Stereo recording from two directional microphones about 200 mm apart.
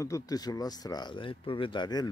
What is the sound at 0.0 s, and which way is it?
Speech, 15° left (ahead or behind).